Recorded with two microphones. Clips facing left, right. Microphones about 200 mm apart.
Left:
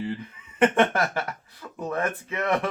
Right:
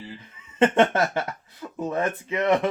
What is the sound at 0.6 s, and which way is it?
Speech, 25° right (ahead or behind).